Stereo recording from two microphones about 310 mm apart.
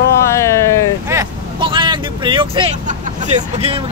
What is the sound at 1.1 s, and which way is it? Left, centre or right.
Vehicle, centre.